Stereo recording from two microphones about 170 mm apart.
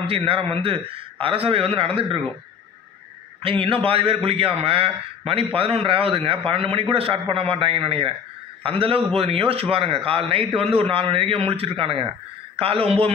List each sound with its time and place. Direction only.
0.0 s a man's voice: 30° right (ahead or behind)
3.4 s a man's voice: 30° right (ahead or behind)